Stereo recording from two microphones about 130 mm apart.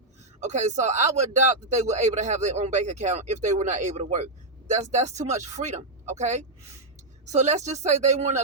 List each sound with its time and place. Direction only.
0.3 s speech: 60° right (ahead or behind)